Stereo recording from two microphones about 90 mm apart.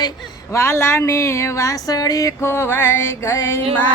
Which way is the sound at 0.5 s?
30° left (ahead or behind).